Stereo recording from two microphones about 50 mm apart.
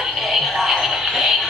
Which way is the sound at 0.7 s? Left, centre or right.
Centre.